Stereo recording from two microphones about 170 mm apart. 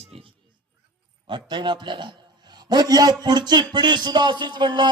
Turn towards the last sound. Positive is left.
turn(degrees=-25)  # may be behind; listen again after turning